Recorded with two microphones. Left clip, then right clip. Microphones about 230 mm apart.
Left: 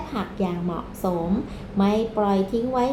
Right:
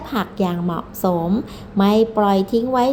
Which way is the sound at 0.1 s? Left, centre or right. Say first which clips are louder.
Right 7 dB; right.